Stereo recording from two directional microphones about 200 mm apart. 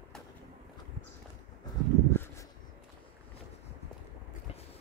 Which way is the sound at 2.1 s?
10° left (ahead or behind).